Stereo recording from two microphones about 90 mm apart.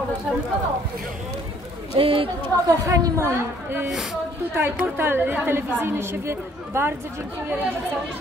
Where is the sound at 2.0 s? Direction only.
90° right.